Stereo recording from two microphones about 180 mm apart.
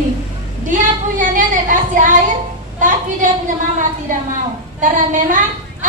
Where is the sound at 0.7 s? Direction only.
45° right (ahead or behind).